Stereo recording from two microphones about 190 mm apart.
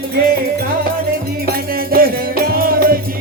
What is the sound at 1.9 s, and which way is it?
Music, 50° right (ahead or behind).